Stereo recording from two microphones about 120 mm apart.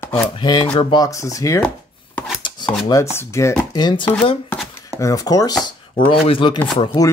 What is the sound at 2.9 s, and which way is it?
Speech, 25° left (ahead or behind).